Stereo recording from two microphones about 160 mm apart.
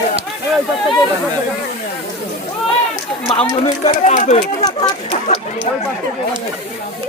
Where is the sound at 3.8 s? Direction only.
45° left (ahead or behind).